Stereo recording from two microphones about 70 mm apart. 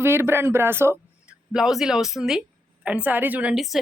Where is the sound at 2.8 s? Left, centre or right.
Centre.